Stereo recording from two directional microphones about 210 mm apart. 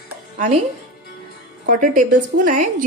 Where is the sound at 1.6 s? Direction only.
40° right (ahead or behind).